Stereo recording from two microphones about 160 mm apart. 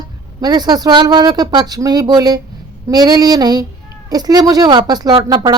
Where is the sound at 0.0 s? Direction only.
25° right (ahead or behind).